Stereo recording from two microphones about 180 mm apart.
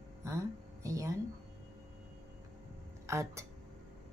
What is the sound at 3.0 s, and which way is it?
Speech, 15° right (ahead or behind).